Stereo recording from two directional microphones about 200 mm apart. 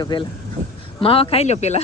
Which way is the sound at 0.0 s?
25° left (ahead or behind).